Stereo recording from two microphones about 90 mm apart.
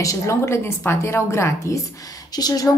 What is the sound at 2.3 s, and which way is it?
Speech, 45° left (ahead or behind).